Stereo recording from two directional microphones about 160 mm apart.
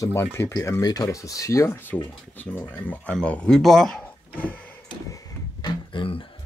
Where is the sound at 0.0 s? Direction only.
15° left (ahead or behind).